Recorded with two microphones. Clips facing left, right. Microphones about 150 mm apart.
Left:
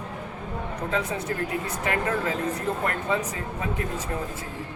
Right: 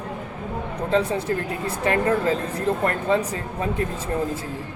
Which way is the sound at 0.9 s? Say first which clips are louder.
Right 8 dB; 30° right (ahead or behind).